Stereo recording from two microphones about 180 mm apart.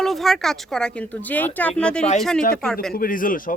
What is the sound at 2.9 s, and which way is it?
Speech, 50° left (ahead or behind).